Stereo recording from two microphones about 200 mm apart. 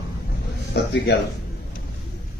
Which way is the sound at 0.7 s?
55° left (ahead or behind).